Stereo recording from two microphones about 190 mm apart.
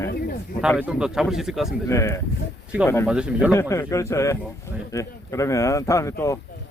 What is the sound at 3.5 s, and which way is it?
Speech, 15° left (ahead or behind).